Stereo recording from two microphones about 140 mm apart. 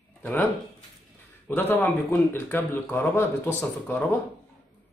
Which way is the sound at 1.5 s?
15° left (ahead or behind).